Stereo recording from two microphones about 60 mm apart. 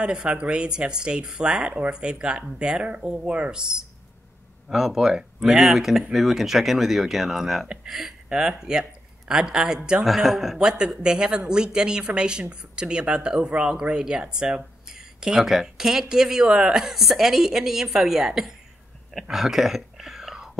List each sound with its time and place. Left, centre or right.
0.0 s a woman's voice: centre
10.0 s a woman's voice: centre
19.3 s whispering: centre